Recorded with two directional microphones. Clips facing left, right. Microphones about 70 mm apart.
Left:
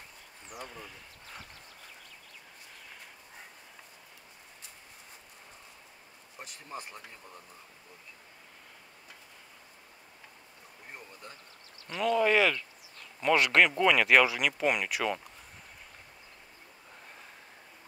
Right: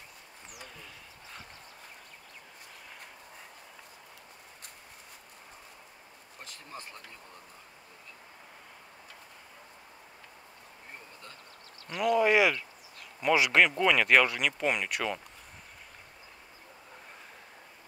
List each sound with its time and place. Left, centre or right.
6.4 s speech: centre
11.9 s speech: centre